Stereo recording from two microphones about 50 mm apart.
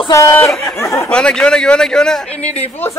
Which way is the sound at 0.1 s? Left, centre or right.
Left.